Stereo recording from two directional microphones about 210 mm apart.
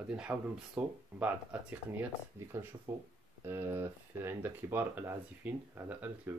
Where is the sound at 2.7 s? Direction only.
15° right (ahead or behind).